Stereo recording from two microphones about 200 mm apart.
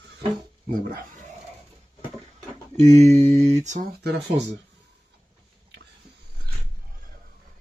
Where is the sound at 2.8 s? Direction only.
35° right (ahead or behind).